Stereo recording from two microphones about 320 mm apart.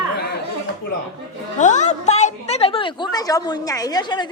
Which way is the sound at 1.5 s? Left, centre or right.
Left.